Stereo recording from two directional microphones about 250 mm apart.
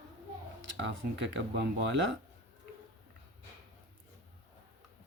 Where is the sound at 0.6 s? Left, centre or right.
Right.